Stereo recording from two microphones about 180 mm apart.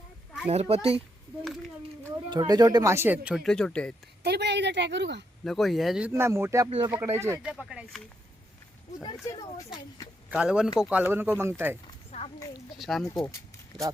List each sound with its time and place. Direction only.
0.4 s a child's voice: 35° right (ahead or behind); by 3.9 s 5° left (ahead or behind)
4.2 s a woman's voice: 65° right (ahead or behind)
5.5 s speech: centre (ahead or behind)
7.5 s speech: centre (ahead or behind)
9.0 s speech: 20° left (ahead or behind)
10.2 s speech: 5° right (ahead or behind)
12.1 s a sound: 35° left (ahead or behind)
12.7 s speech: centre (ahead or behind)